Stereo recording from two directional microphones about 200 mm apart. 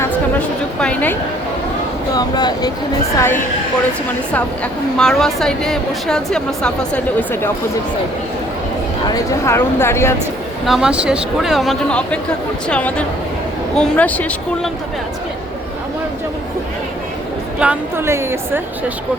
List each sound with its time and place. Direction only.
0.0 s a sound: 5° left (ahead or behind)
2.1 s speech: 20° left (ahead or behind)
4.9 s speech: centre (ahead or behind)
9.0 s speech: 15° left (ahead or behind)
10.7 s speech: 5° right (ahead or behind)
17.6 s a woman's voice: 10° right (ahead or behind)